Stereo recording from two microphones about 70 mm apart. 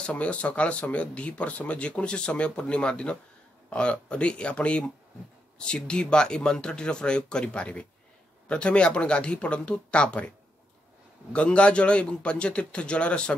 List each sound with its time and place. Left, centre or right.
0.0 s speech: centre
11.3 s speech: centre